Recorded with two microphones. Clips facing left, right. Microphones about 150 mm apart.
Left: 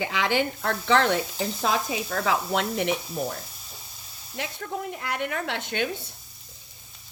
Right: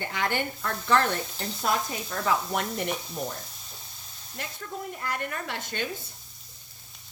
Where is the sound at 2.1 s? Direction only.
65° left (ahead or behind).